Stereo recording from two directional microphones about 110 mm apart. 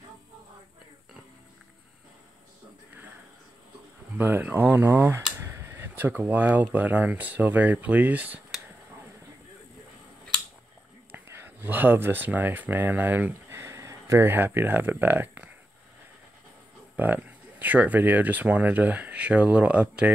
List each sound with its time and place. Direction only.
4.2 s speech: 15° right (ahead or behind)
11.1 s speech: 20° right (ahead or behind)
16.9 s speech: 15° right (ahead or behind)